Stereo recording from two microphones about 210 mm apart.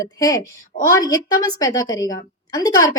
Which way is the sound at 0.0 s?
15° left (ahead or behind).